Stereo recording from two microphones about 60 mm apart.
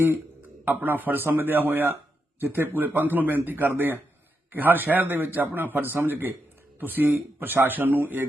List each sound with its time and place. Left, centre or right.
0.6 s a man's voice: right